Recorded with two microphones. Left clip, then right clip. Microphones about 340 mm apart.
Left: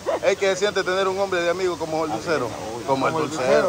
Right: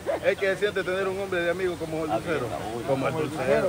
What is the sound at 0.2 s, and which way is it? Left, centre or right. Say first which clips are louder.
A man's voice: left 4 dB; centre.